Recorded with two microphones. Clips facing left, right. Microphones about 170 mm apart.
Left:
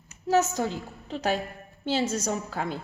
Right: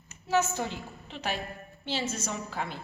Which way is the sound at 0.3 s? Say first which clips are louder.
Left 4 dB; 40° left (ahead or behind).